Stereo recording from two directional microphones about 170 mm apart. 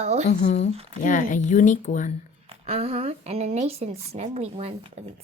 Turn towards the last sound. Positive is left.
turn(degrees=-35)  # may be behind; listen again after turning